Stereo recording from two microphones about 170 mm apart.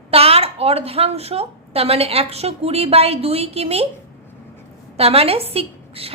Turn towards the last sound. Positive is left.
turn(degrees=-35)  # may be behind; listen again after turning